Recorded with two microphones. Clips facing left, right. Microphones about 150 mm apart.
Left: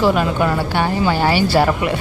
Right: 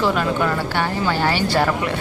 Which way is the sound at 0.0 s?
15° left (ahead or behind).